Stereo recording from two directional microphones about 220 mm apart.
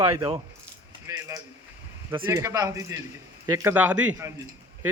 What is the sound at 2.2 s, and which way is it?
A man's voice, 15° right (ahead or behind).